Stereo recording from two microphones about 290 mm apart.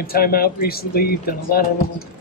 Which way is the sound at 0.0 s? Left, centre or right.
Left.